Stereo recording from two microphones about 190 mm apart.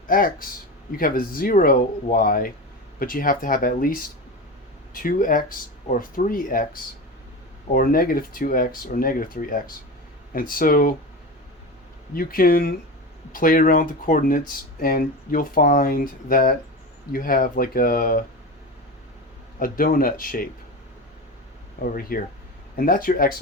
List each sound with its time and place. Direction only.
0.1 s speech: 50° left (ahead or behind)
4.9 s speech: 45° left (ahead or behind)
12.1 s speech: 50° left (ahead or behind)
19.5 s speech: 45° left (ahead or behind)
21.8 s speech: 50° left (ahead or behind)